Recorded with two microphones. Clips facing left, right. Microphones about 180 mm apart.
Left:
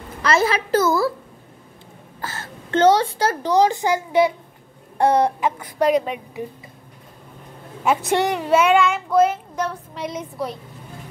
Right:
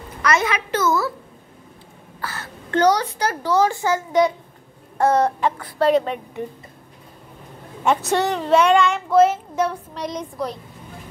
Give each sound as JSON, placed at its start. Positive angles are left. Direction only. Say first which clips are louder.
{"t": 0.2, "sound": "a woman's voice", "louder": "left 2 dB", "side_deg": 30}
{"t": 2.2, "sound": "a woman's voice", "louder": "even", "side_deg": 25}
{"t": 8.0, "sound": "child singing", "louder": "left 1 dB", "side_deg": 15}